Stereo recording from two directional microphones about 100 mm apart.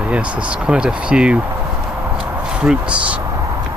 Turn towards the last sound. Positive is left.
turn(degrees=-10)  # may be behind; listen again after turning